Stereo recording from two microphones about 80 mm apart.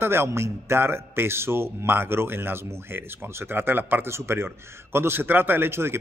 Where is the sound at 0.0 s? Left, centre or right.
Right.